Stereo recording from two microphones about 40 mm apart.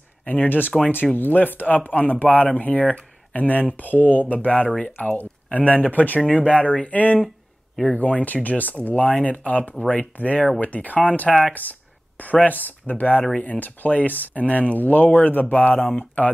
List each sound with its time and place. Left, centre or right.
0.2 s speech: left
6.3 s speech: left
11.2 s speech: centre
12.2 s speech: left